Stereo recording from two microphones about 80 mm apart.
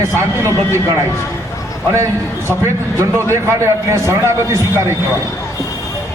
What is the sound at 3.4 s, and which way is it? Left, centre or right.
A man's voice, right.